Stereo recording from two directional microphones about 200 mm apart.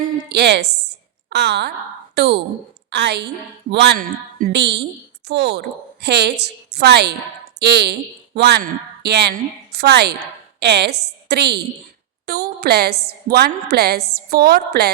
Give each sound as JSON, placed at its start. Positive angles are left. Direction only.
{"t": 0.0, "sound": "a woman's voice", "side_deg": -55}